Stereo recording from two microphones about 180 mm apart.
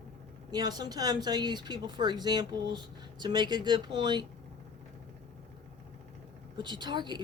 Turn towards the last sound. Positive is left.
turn(degrees=-25)  # may be behind; listen again after turning